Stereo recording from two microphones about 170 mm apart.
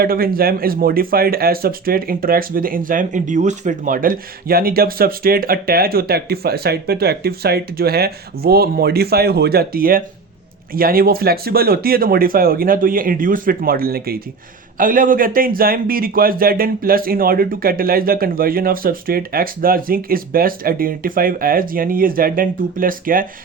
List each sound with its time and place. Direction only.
0.0 s speech: 60° right (ahead or behind)